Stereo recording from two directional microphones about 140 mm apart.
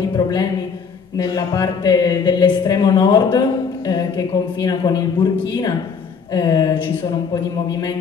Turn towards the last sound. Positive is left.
turn(degrees=35)  # may be behind; listen again after turning